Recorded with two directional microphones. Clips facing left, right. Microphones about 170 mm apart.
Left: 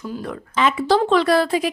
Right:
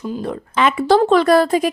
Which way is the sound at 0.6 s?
60° right (ahead or behind).